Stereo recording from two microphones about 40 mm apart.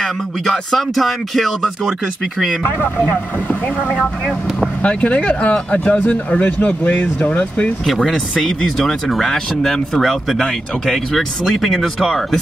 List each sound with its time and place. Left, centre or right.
0.0 s speech: centre
4.8 s speech: left
7.8 s speech: centre